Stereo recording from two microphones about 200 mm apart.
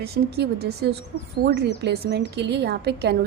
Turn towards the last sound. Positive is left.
turn(degrees=-55)  # may be behind; listen again after turning